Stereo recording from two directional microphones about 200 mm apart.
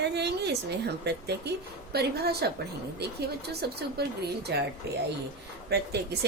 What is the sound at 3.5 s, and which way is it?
A woman's voice, 55° right (ahead or behind).